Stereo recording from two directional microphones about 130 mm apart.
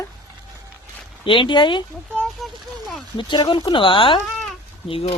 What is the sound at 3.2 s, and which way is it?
Speech, 35° left (ahead or behind).